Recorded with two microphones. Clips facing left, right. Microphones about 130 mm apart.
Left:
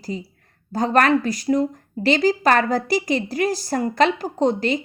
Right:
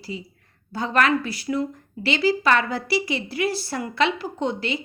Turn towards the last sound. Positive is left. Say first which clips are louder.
# left 6 dB
turn(degrees=40)  # may be behind; listen again after turning